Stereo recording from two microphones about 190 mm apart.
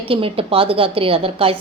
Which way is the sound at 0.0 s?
30° right (ahead or behind).